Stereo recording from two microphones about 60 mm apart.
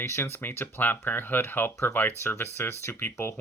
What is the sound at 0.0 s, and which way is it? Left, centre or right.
Speech, left.